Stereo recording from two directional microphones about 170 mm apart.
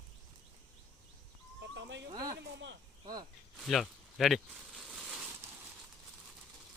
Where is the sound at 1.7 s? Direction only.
90° right.